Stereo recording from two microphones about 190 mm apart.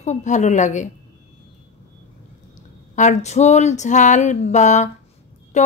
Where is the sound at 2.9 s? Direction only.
40° left (ahead or behind).